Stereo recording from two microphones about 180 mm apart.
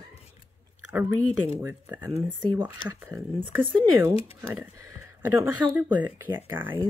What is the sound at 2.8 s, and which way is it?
Speech, 20° right (ahead or behind).